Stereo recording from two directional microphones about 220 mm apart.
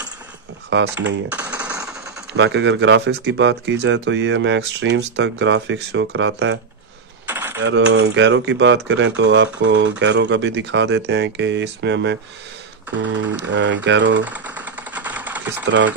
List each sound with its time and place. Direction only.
0.7 s speech: 55° right (ahead or behind)
1.3 s typing: 5° right (ahead or behind)
2.3 s speech: 55° right (ahead or behind)
7.2 s typing: 10° right (ahead or behind)
7.5 s speech: 55° right (ahead or behind)
13.5 s speech: 55° right (ahead or behind)
14.2 s a sound: 5° right (ahead or behind)
15.6 s speech: 55° right (ahead or behind)